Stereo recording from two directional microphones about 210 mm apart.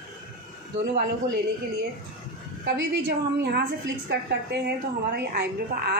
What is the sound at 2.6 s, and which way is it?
A woman's voice, 55° right (ahead or behind).